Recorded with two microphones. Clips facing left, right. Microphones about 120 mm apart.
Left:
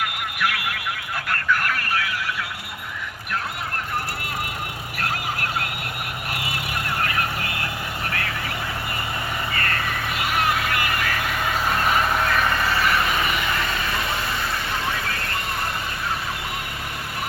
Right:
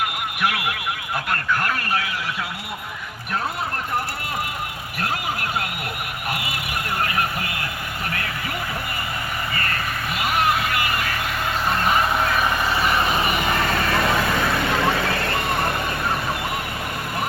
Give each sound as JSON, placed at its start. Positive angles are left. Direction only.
{"t": 0.0, "sound": "a sound", "side_deg": -25}
{"t": 1.3, "sound": "speech", "side_deg": -25}
{"t": 4.9, "sound": "vehicle", "side_deg": -20}
{"t": 10.2, "sound": "vehicle", "side_deg": -20}
{"t": 11.9, "sound": "vehicle", "side_deg": -5}
{"t": 13.5, "sound": "vehicle", "side_deg": -45}
{"t": 13.9, "sound": "vehicle", "side_deg": -65}